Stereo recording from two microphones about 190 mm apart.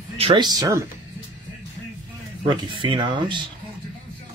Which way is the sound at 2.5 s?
25° right (ahead or behind).